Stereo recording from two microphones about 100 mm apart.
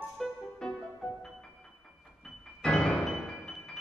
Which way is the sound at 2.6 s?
10° left (ahead or behind).